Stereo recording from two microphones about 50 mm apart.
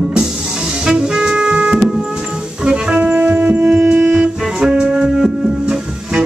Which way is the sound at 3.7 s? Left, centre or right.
Right.